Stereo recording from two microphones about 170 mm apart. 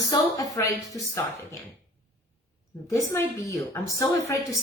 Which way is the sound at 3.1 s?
15° left (ahead or behind).